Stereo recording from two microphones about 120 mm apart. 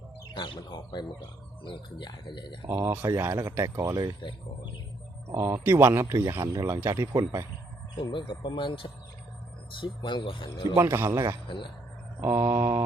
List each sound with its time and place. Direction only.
0.3 s speech: 40° left (ahead or behind)
2.6 s speech: 20° right (ahead or behind)
4.2 s speech: 40° left (ahead or behind)
5.3 s speech: 20° right (ahead or behind)
7.9 s speech: 40° left (ahead or behind)
10.8 s speech: 20° right (ahead or behind)
11.4 s speech: 45° left (ahead or behind)
12.2 s speech: 20° right (ahead or behind)